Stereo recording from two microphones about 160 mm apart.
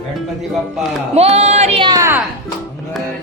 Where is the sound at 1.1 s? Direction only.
40° right (ahead or behind).